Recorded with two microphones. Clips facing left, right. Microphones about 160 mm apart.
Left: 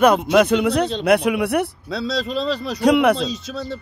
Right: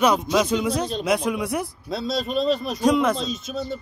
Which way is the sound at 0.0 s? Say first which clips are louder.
Left 5 dB; 60° left (ahead or behind).